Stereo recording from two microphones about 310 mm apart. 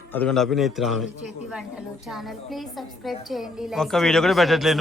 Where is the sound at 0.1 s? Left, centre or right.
Centre.